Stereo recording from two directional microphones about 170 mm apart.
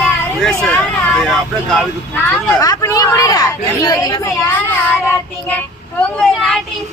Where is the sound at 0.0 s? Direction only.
5° left (ahead or behind).